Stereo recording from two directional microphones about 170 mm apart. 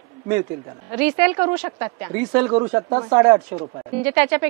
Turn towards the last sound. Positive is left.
turn(degrees=-10)  # may be behind; listen again after turning